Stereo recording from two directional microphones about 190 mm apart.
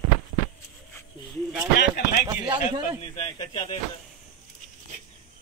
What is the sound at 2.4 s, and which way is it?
Speech, 20° right (ahead or behind).